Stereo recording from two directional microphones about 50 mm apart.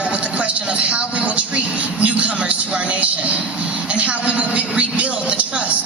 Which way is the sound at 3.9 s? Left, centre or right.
Right.